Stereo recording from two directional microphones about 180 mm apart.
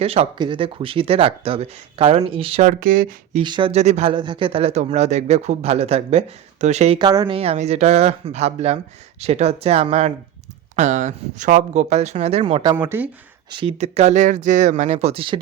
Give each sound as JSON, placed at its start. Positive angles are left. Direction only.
{"t": 0.0, "sound": "speech", "side_deg": -35}
{"t": 2.6, "sound": "speech", "side_deg": -50}
{"t": 3.4, "sound": "speech", "side_deg": -25}
{"t": 7.0, "sound": "speech", "side_deg": -20}
{"t": 12.6, "sound": "speech", "side_deg": -20}
{"t": 13.5, "sound": "speech", "side_deg": -30}